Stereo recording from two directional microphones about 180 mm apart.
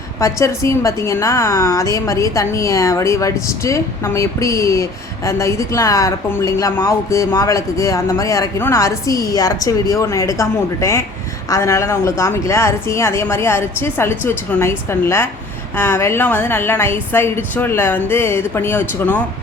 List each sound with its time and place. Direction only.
0.2 s a woman's voice: 15° left (ahead or behind)